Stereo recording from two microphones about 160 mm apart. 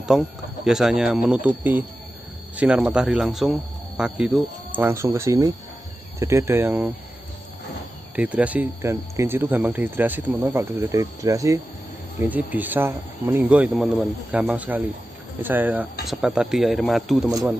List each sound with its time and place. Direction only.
0.1 s speech: 5° right (ahead or behind)
4.7 s speech: 15° right (ahead or behind)
8.2 s speech: 10° right (ahead or behind)